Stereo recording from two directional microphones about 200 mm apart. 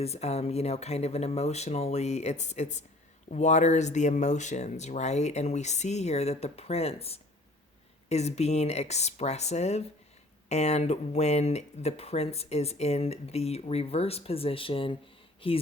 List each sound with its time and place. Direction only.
0.0 s speech: 30° left (ahead or behind)